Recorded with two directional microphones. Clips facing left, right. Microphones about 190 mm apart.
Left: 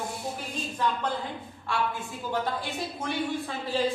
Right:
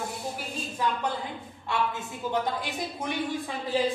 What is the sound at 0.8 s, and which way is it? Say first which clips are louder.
Speech: even; 10° right (ahead or behind).